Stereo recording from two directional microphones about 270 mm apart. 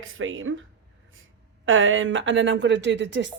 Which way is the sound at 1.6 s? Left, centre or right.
Right.